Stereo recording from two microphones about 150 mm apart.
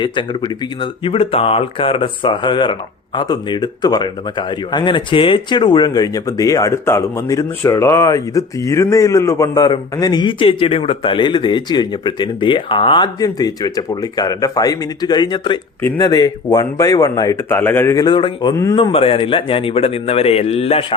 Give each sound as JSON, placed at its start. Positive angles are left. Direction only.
{"t": 0.0, "sound": "speech", "side_deg": 30}
{"t": 17.5, "sound": "speech", "side_deg": 15}
{"t": 18.5, "sound": "speech", "side_deg": 20}
{"t": 18.8, "sound": "speech", "side_deg": 35}